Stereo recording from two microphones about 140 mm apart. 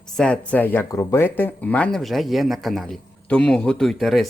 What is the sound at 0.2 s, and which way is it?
Speech, 10° left (ahead or behind).